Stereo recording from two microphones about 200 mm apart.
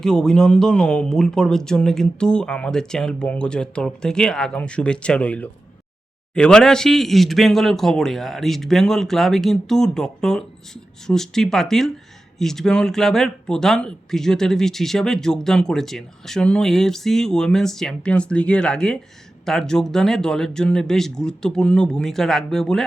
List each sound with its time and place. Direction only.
0.0 s speech: 5° left (ahead or behind)